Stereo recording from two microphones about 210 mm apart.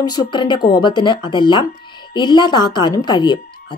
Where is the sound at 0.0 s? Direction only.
20° left (ahead or behind).